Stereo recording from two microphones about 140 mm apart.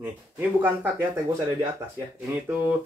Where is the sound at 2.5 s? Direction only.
15° right (ahead or behind).